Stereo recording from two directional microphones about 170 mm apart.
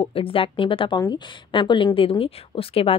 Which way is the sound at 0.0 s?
30° left (ahead or behind).